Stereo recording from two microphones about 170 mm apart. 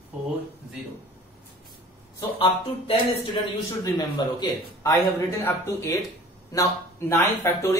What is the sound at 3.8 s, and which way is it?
A man's voice, 25° left (ahead or behind).